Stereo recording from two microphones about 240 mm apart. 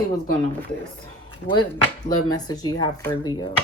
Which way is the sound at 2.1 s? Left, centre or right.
Centre.